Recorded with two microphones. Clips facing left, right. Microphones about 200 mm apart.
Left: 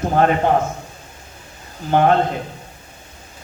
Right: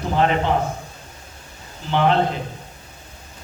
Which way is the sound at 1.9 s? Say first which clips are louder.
Left 4 dB; 50° left (ahead or behind).